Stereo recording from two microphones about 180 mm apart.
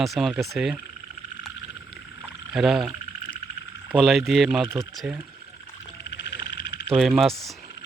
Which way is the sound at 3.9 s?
Centre (ahead or behind).